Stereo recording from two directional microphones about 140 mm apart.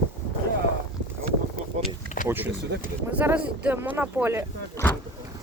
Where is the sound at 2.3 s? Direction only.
15° right (ahead or behind).